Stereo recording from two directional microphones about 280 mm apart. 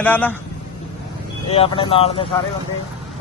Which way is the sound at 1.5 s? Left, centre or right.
Centre.